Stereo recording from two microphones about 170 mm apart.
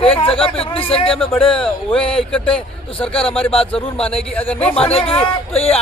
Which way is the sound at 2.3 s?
5° left (ahead or behind).